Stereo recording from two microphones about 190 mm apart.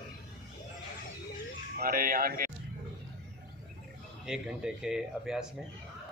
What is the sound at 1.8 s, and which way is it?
Speech, 50° right (ahead or behind).